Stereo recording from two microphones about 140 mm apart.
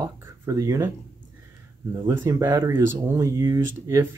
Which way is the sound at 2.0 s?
20° right (ahead or behind).